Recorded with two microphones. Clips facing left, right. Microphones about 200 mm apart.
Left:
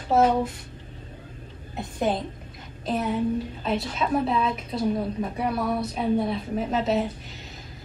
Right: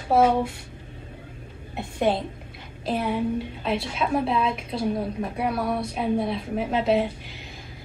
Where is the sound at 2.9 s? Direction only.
10° right (ahead or behind).